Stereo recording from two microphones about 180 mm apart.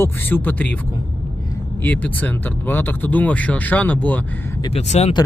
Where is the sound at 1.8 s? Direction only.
10° left (ahead or behind).